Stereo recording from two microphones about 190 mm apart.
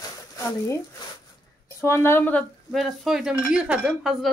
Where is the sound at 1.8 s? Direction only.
15° left (ahead or behind).